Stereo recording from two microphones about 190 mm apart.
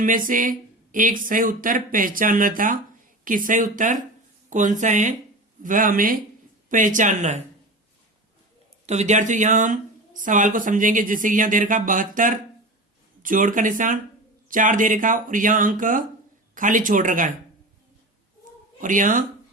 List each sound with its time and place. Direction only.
0.0 s speech: 45° right (ahead or behind)
8.9 s speech: 35° right (ahead or behind)
18.8 s speech: 45° right (ahead or behind)